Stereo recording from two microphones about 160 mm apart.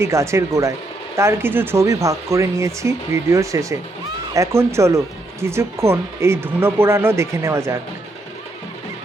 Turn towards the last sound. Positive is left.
turn(degrees=-15)  # may be behind; listen again after turning